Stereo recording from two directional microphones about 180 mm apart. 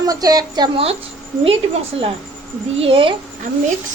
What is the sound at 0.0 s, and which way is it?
Speech, 20° right (ahead or behind).